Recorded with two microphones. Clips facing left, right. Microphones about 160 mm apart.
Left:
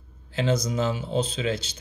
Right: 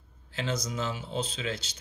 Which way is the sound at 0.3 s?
20° left (ahead or behind).